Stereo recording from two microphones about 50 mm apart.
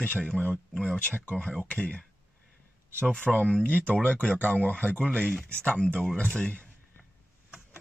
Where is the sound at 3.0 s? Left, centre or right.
Left.